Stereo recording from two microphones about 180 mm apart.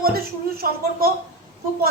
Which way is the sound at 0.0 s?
55° right (ahead or behind).